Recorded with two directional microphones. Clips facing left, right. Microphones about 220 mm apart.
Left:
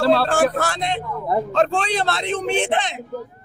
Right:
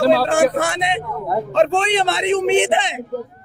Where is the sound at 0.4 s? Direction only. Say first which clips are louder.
Right 3 dB; 20° right (ahead or behind).